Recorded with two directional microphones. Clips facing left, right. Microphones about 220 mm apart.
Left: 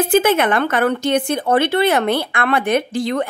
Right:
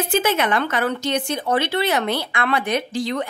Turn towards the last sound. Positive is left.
turn(degrees=55)  # may be behind; listen again after turning